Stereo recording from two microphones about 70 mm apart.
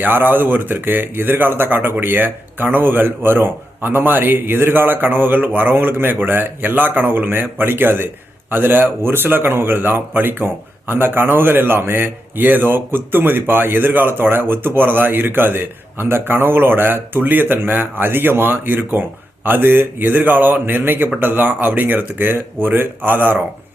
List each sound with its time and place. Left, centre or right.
0.0 s speech: right